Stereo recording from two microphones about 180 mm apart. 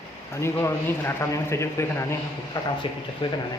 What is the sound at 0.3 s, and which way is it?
A man's voice, 15° left (ahead or behind).